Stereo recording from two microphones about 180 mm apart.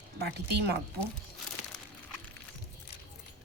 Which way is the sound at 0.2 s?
65° right (ahead or behind).